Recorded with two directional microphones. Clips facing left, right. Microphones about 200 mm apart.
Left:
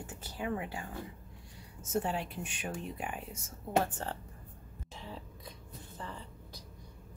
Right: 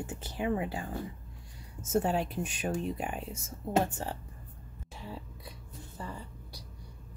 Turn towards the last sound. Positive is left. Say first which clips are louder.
# right 2 dB
turn(degrees=-10)  # may be behind; listen again after turning